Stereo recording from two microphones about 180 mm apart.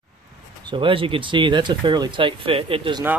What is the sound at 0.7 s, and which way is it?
Speech, 30° right (ahead or behind).